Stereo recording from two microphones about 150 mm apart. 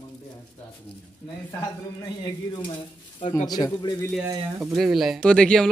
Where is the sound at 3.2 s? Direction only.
40° left (ahead or behind).